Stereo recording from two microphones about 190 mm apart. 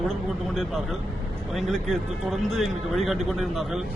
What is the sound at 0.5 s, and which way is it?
Speech, centre (ahead or behind).